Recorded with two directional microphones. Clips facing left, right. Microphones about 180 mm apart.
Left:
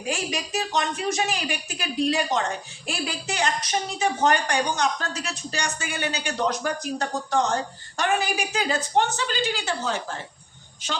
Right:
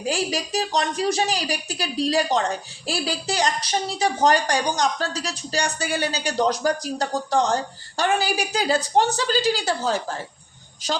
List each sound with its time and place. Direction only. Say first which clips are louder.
0.1 s a woman's voice: right 3 dB; 35° right (ahead or behind)